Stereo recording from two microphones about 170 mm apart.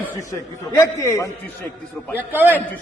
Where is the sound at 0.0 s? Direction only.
20° left (ahead or behind).